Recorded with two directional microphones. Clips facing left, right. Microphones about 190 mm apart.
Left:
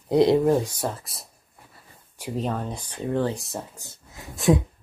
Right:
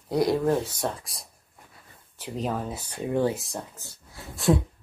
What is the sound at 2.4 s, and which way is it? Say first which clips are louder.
Speech: right 3 dB; 5° right (ahead or behind).